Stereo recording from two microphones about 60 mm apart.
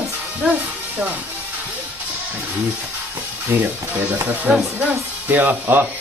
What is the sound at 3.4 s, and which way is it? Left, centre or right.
Speech, right.